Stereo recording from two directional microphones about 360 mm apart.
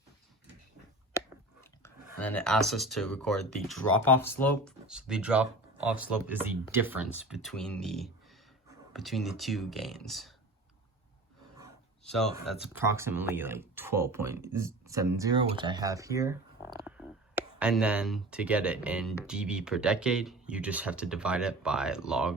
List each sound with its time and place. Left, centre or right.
1.8 s speech: centre
12.0 s speech: centre